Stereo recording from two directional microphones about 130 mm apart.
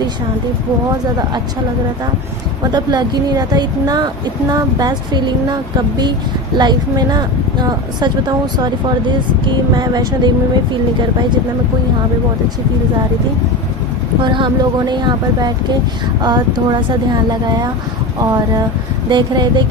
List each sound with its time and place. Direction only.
2.7 s speech: 35° right (ahead or behind)
9.7 s speech: 30° right (ahead or behind)
14.2 s speech: 40° right (ahead or behind)